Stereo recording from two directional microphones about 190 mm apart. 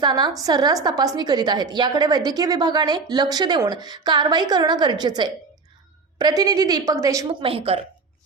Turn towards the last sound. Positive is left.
turn(degrees=-30)  # may be behind; listen again after turning